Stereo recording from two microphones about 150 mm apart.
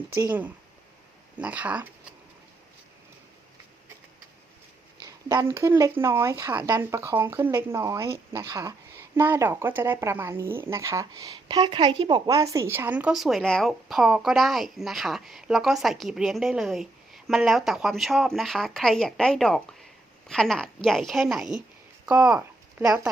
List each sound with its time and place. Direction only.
0.3 s speech: 10° right (ahead or behind)
5.0 s speech: 25° right (ahead or behind)